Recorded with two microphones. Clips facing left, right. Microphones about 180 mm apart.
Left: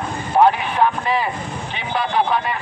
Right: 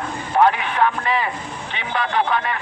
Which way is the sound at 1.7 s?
35° left (ahead or behind).